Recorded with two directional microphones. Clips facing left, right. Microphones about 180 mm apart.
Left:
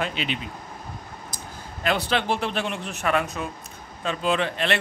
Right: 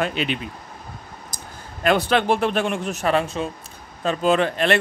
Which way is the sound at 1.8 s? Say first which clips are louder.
Right 6 dB; 50° right (ahead or behind).